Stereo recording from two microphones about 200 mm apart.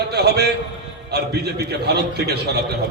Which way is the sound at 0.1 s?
55° right (ahead or behind).